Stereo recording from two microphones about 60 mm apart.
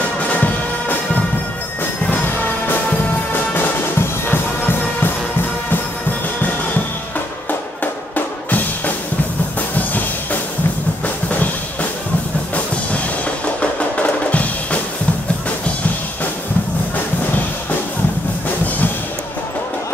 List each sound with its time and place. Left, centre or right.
0.3 s music: left
4.3 s music: left
8.5 s music: left
13.6 s percussion: left